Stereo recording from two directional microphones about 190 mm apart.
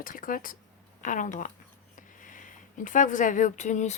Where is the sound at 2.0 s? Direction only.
45° left (ahead or behind).